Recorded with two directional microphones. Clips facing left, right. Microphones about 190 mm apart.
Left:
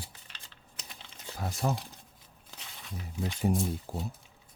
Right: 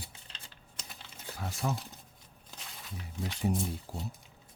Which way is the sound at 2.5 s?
Centre (ahead or behind).